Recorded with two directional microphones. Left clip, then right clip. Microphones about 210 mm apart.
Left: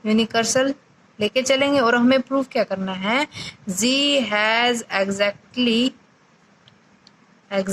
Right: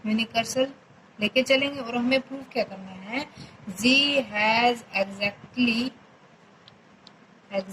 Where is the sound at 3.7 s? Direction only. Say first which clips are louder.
Left 2 dB; 55° left (ahead or behind).